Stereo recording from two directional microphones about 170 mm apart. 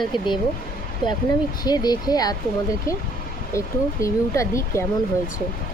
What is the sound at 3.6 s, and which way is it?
Speech, 15° left (ahead or behind).